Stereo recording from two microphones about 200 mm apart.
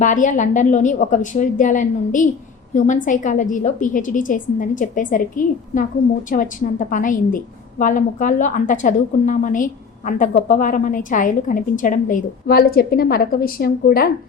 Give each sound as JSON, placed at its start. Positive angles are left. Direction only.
{"t": 0.0, "sound": "a woman's voice", "side_deg": 40}